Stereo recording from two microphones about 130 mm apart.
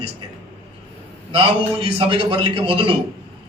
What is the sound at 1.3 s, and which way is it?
A man's voice, 40° right (ahead or behind).